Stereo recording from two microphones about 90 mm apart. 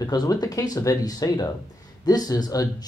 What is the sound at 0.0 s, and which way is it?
Speech, 45° left (ahead or behind).